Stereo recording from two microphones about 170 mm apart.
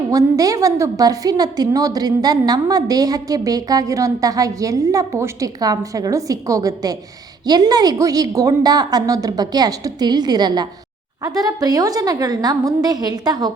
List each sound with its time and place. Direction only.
0.1 s a woman's voice: 20° right (ahead or behind)